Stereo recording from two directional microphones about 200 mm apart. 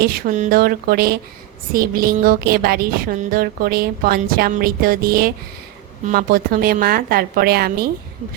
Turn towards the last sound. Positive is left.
turn(degrees=-50)  # may be behind; listen again after turning